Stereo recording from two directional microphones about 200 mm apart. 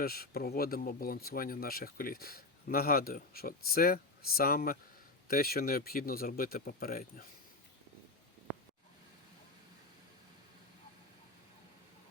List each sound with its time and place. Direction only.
0.0 s speech: 50° left (ahead or behind)